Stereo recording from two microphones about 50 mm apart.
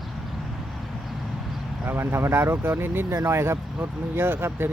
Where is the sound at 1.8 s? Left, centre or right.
Right.